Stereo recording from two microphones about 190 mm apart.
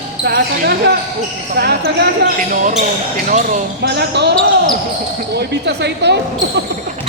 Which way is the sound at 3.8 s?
60° right (ahead or behind).